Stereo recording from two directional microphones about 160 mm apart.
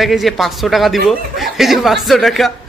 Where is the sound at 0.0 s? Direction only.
Centre (ahead or behind).